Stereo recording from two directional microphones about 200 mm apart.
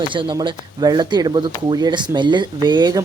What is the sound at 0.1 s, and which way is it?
Speech, 25° right (ahead or behind).